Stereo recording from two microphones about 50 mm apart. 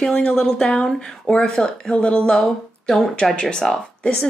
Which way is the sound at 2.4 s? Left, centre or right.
Centre.